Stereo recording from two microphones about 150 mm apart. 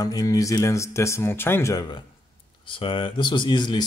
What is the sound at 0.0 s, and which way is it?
Speech, 25° left (ahead or behind).